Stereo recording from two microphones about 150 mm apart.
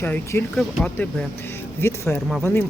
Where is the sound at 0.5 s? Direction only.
5° left (ahead or behind).